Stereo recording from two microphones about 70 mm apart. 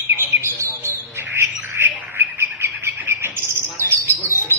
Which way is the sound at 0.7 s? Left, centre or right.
Right.